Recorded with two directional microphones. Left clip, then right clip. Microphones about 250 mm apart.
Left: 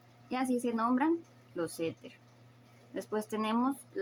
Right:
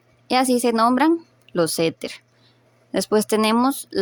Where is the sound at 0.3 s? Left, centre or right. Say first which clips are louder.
Right 15 dB; right.